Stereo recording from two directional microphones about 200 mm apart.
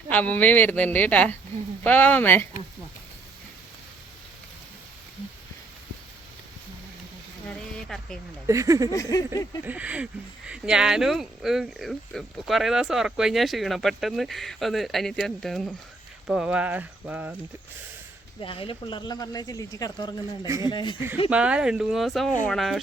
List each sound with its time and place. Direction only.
0.1 s speech: 10° left (ahead or behind)
7.5 s a sound: centre (ahead or behind)
8.4 s speech: 15° right (ahead or behind)
8.9 s speech: 15° left (ahead or behind)
9.6 s speech: 5° right (ahead or behind)
18.3 s speech: 25° left (ahead or behind)
21.2 s speech: 5° right (ahead or behind)